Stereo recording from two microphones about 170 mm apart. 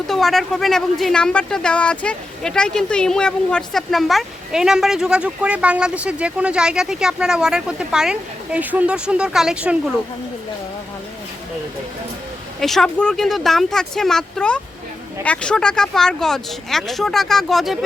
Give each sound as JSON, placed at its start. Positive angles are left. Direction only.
{"t": 0.1, "sound": "speech", "side_deg": 0}
{"t": 12.5, "sound": "speech", "side_deg": 0}